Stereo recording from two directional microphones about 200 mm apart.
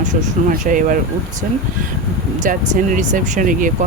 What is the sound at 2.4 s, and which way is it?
Speech, 40° right (ahead or behind).